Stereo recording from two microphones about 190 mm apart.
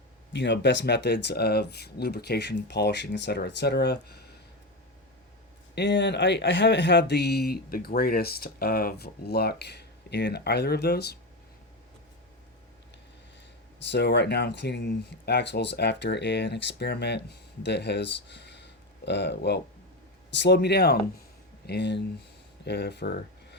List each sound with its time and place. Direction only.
0.3 s speech: 65° left (ahead or behind)
5.7 s speech: 65° left (ahead or behind)
13.9 s speech: 65° left (ahead or behind)